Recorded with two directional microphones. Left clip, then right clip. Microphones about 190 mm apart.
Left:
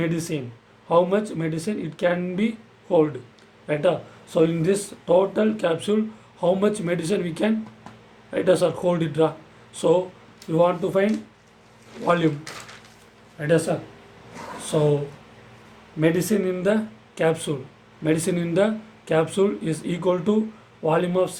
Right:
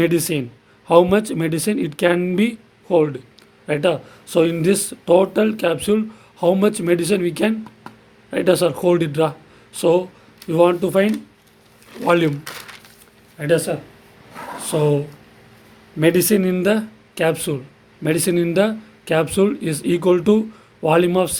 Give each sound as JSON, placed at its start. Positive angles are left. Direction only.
{"t": 0.0, "sound": "speech", "side_deg": -55}
{"t": 12.0, "sound": "speech", "side_deg": -50}
{"t": 13.4, "sound": "speech", "side_deg": -50}
{"t": 14.6, "sound": "a sound", "side_deg": -50}
{"t": 16.0, "sound": "speech", "side_deg": -55}